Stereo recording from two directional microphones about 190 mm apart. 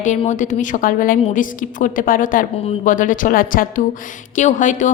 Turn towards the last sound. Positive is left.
turn(degrees=40)  # may be behind; listen again after turning